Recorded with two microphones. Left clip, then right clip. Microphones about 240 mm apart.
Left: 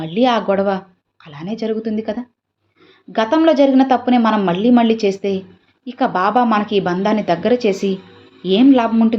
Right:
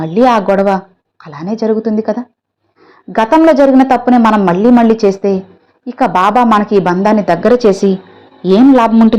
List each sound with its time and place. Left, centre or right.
0.0 s a woman's voice: right